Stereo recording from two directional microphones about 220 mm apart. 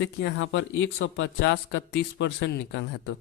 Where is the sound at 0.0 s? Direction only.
55° left (ahead or behind).